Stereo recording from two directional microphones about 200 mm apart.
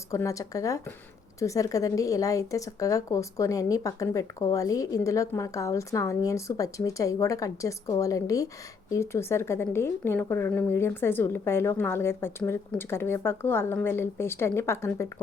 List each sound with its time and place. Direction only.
0.1 s speech: 15° left (ahead or behind)